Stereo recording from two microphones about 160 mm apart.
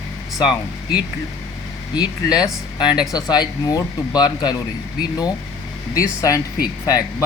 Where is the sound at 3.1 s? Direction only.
25° left (ahead or behind).